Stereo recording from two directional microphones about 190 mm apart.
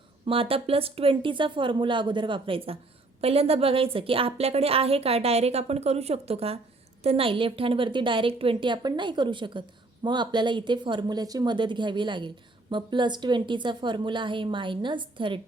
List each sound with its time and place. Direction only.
0.3 s a woman's voice: 30° right (ahead or behind)